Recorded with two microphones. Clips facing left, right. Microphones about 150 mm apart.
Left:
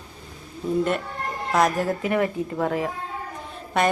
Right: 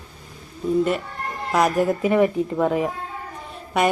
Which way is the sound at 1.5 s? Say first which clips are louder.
Right 2 dB; 10° right (ahead or behind).